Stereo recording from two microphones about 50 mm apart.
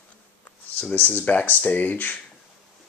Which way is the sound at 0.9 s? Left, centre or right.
Left.